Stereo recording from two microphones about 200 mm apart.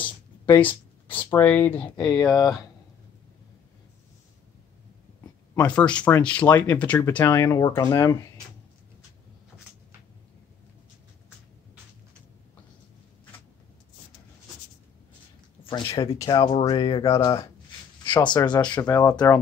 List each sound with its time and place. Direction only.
0.6 s speech: 10° left (ahead or behind)
5.6 s speech: 5° left (ahead or behind)
15.6 s speech: 25° left (ahead or behind)